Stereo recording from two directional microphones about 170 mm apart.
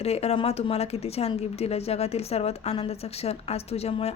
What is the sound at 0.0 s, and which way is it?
Speech, 40° left (ahead or behind).